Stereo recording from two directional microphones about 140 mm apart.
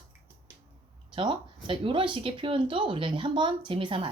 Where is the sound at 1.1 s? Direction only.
35° right (ahead or behind).